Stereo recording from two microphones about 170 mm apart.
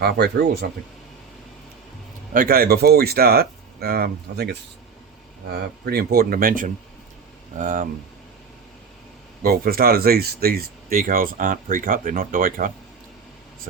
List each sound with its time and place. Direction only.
0.0 s speech: 70° right (ahead or behind)
2.3 s speech: 60° right (ahead or behind)
5.8 s speech: 65° right (ahead or behind); by 7.9 s 50° right (ahead or behind)
9.4 s speech: 60° right (ahead or behind)